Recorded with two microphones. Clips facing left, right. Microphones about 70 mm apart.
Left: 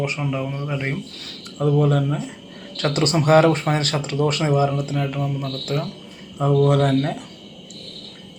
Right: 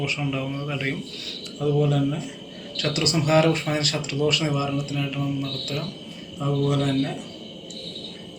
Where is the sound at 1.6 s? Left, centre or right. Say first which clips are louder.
Left 3 dB; left.